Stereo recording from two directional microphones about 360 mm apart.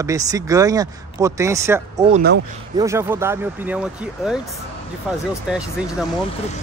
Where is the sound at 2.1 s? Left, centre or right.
Right.